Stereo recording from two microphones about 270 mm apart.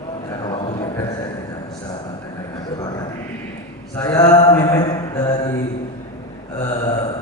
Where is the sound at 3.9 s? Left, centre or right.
Centre.